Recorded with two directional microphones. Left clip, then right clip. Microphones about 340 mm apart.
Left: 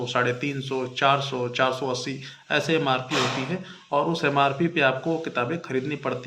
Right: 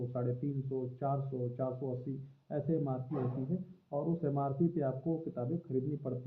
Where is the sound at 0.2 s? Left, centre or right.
Left.